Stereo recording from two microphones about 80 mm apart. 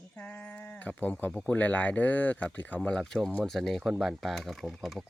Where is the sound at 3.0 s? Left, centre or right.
Centre.